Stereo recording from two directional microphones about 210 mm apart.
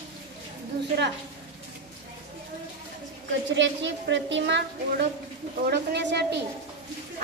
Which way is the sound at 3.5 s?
60° right (ahead or behind).